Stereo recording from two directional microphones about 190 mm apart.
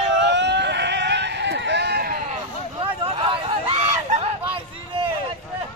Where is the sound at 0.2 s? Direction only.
65° right (ahead or behind).